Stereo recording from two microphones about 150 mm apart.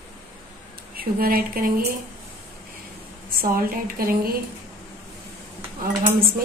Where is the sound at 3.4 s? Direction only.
75° right (ahead or behind).